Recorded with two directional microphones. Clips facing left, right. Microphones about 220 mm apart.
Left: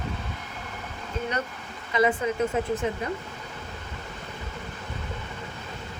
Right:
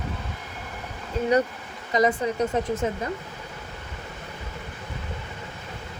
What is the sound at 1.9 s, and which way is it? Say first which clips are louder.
Speech: right 1 dB; 40° right (ahead or behind).